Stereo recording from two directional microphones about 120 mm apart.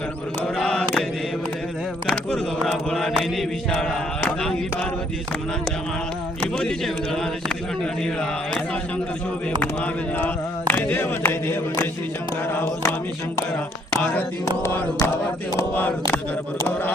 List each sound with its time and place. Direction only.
0.4 s mantra: 5° left (ahead or behind)
2.9 s speech: centre (ahead or behind)
6.4 s speech: 5° left (ahead or behind)
12.5 s music: 20° left (ahead or behind)
13.9 s music: 15° left (ahead or behind)
15.7 s a sound: 15° left (ahead or behind)